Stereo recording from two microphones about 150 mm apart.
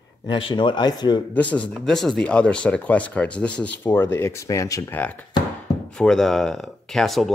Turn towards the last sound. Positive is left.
turn(degrees=0)  # may be behind; listen again after turning